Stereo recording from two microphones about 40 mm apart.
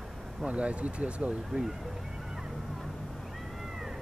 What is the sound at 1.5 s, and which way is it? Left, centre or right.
Speech, centre.